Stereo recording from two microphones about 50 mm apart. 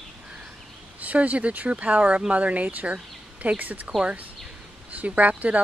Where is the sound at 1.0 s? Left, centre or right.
Right.